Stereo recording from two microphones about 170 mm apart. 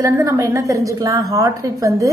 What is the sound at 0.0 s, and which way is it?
A woman's voice, 20° right (ahead or behind).